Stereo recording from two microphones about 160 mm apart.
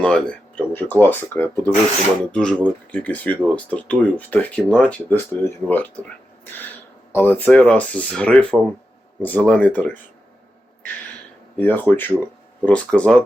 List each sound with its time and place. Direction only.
0.0 s speech: 5° left (ahead or behind)
11.1 s a sound: 10° left (ahead or behind)
12.6 s speech: 10° left (ahead or behind)